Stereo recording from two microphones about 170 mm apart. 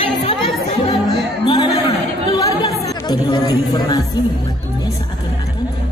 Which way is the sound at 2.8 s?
25° left (ahead or behind).